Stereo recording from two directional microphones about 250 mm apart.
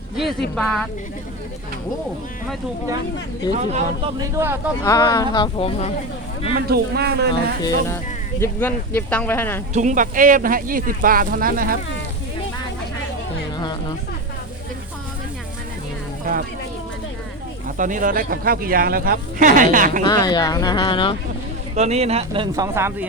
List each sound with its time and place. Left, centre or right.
0.2 s speech: centre
3.6 s speech: right
4.4 s speech: centre
4.8 s speech: centre
6.5 s speech: right
8.4 s speech: centre
9.7 s speech: right
17.7 s speech: right
20.1 s speech: centre
21.8 s speech: right; by 23.0 s centre